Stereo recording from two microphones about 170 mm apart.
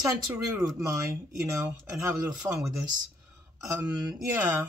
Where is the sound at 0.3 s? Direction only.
20° right (ahead or behind).